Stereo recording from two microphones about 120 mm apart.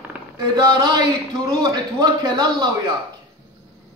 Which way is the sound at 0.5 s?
35° right (ahead or behind).